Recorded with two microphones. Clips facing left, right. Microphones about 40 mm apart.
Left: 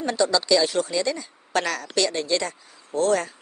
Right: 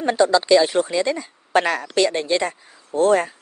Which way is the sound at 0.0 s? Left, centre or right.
Right.